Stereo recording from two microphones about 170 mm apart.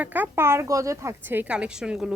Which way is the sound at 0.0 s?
10° right (ahead or behind).